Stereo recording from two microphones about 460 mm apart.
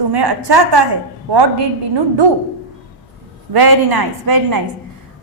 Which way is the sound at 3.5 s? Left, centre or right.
Right.